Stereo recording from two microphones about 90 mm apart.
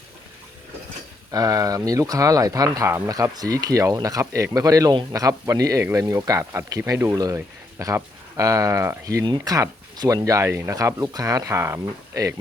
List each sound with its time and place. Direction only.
1.3 s speech: 40° right (ahead or behind)
9.2 s speech: 50° right (ahead or behind); by 12.2 s 25° right (ahead or behind)